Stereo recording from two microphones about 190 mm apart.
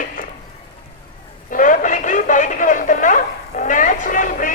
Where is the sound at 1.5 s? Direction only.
45° left (ahead or behind).